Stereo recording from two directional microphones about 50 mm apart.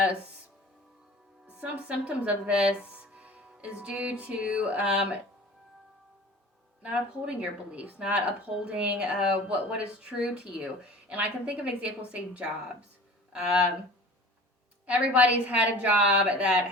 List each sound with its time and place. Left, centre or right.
1.5 s speech: right
2.9 s music: right
3.6 s speech: right
4.9 s speech: centre
6.8 s speech: right
14.8 s speech: right